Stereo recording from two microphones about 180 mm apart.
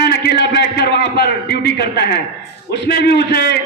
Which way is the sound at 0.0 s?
65° left (ahead or behind).